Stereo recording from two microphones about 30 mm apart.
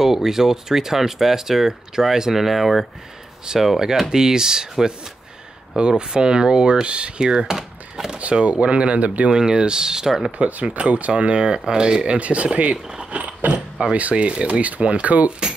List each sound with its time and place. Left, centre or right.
0.0 s speech: centre
8.5 s speech: right
9.3 s speech: right
10.3 s speech: right
11.4 s speech: right
12.1 s speech: right